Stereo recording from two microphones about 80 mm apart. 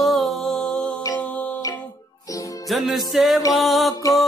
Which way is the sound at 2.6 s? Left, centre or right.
Centre.